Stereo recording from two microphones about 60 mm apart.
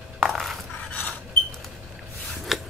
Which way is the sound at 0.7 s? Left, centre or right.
Left.